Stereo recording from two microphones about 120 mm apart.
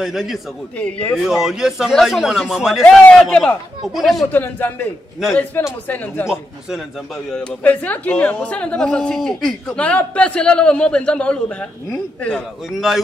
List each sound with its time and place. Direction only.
0.0 s a man's voice: centre (ahead or behind)
0.7 s a woman's voice: 10° left (ahead or behind)
1.1 s a man's voice: 5° right (ahead or behind)
4.3 s a woman's voice: 15° left (ahead or behind)
7.2 s a woman's voice: 10° left (ahead or behind)